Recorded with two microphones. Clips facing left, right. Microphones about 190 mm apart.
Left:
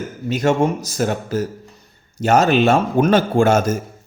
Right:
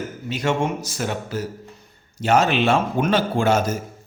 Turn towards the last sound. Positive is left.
turn(degrees=45)  # may be behind; listen again after turning